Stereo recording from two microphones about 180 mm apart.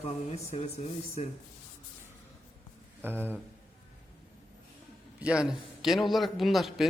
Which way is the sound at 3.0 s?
10° right (ahead or behind).